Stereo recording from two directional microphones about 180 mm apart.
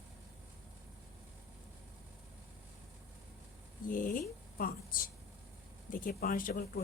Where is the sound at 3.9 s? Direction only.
50° left (ahead or behind).